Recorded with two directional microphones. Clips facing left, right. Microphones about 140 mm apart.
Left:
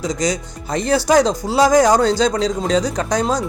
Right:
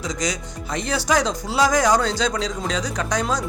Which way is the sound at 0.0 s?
35° left (ahead or behind).